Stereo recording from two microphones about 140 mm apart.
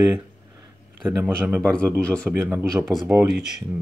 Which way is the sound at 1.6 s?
10° left (ahead or behind).